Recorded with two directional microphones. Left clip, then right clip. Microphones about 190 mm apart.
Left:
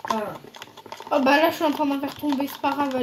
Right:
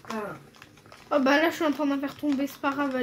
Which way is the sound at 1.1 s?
30° right (ahead or behind).